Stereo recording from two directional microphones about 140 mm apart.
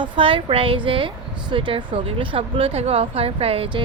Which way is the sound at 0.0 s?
40° right (ahead or behind).